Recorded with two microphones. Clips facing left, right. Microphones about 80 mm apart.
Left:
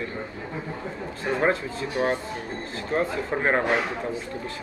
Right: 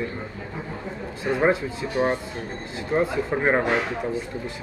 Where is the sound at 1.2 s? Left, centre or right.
Centre.